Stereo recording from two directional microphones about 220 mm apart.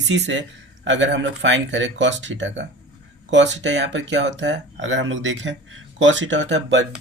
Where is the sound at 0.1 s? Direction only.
55° right (ahead or behind).